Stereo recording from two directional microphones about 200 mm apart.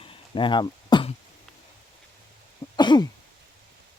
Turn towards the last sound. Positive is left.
turn(degrees=20)  # may be behind; listen again after turning